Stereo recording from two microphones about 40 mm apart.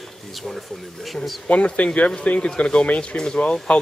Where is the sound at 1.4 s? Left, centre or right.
Left.